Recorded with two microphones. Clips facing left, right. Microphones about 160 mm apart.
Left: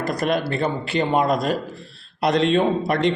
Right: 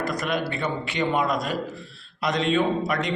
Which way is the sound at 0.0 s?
35° left (ahead or behind).